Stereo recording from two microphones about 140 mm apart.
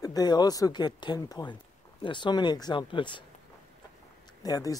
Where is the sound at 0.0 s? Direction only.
25° left (ahead or behind).